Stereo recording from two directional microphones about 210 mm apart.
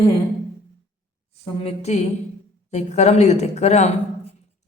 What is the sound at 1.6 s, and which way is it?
A woman's voice, 30° left (ahead or behind).